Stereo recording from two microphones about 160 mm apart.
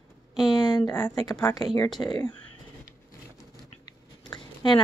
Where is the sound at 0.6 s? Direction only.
25° left (ahead or behind).